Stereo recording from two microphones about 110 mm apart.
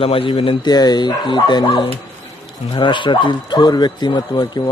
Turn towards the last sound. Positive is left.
turn(degrees=40)  # may be behind; listen again after turning